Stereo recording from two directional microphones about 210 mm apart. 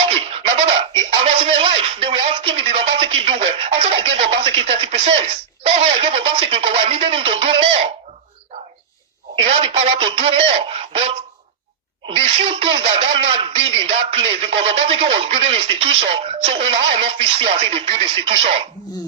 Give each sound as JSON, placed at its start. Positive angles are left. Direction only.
{"t": 0.1, "sound": "a sound", "side_deg": -25}
{"t": 1.2, "sound": "speech", "side_deg": -30}
{"t": 9.5, "sound": "speech", "side_deg": -25}